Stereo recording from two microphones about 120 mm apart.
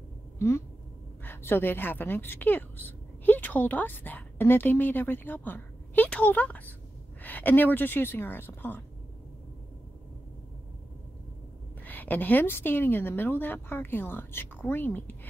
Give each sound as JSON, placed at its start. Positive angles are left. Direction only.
{"t": 0.4, "sound": "a woman's voice", "side_deg": 25}
{"t": 11.8, "sound": "a woman's voice", "side_deg": 15}